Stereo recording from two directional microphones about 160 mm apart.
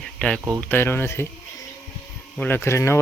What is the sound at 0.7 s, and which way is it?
Speech, 15° left (ahead or behind).